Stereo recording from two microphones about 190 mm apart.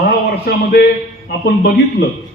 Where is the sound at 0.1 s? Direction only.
55° left (ahead or behind).